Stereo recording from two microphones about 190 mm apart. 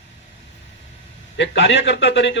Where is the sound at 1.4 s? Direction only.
75° left (ahead or behind).